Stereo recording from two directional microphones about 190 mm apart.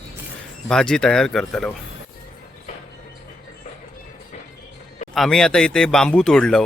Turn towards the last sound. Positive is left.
turn(degrees=5)  # may be behind; listen again after turning